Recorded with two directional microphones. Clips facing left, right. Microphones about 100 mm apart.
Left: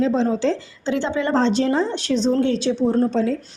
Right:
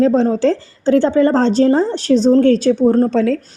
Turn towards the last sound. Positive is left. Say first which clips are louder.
# right 5 dB
turn(degrees=-90)